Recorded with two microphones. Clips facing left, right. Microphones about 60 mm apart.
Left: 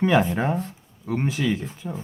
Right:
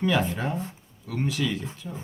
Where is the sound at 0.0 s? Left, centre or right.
Left.